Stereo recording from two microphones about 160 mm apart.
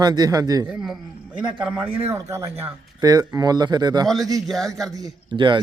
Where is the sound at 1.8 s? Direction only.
35° right (ahead or behind).